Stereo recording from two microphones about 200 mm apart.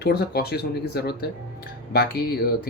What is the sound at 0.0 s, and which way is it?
Speech, 50° left (ahead or behind).